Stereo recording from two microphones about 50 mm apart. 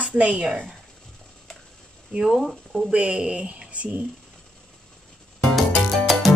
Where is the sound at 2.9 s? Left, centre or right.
Right.